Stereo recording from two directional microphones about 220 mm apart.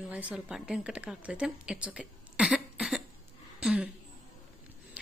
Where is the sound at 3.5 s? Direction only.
5° right (ahead or behind).